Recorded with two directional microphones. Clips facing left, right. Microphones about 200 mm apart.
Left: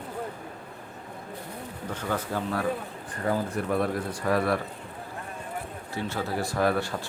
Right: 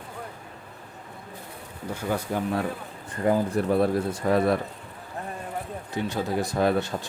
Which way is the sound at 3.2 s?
25° right (ahead or behind).